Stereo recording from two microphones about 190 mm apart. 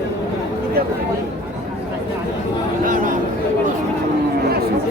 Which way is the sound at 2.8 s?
45° right (ahead or behind).